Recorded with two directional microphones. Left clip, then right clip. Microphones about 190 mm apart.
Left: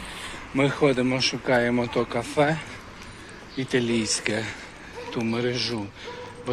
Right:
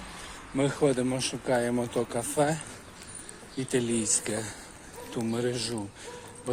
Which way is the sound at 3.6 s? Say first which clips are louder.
Left 4 dB; 25° right (ahead or behind).